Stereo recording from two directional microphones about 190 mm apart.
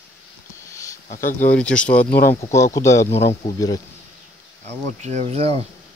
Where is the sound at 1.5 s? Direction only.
5° left (ahead or behind).